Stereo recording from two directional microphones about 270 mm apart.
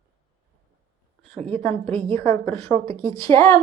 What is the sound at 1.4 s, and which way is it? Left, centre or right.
Speech, right.